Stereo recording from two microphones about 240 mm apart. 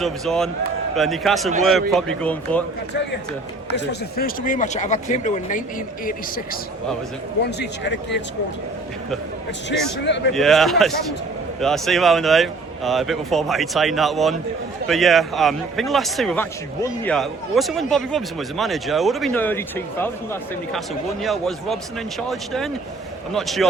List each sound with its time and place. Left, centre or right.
0.0 s speech: centre
3.8 s speech: left
10.3 s speech: centre